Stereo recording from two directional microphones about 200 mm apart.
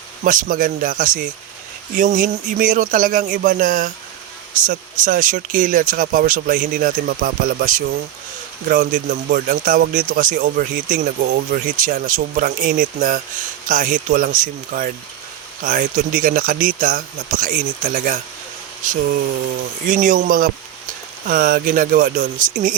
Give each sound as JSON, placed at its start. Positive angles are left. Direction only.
{"t": 0.3, "sound": "speech", "side_deg": -40}